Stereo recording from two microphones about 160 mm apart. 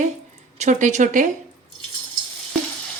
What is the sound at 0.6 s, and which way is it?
Frying, 50° right (ahead or behind).